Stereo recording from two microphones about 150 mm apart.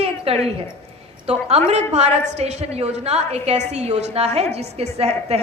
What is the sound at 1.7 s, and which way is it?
A woman's voice, 45° right (ahead or behind).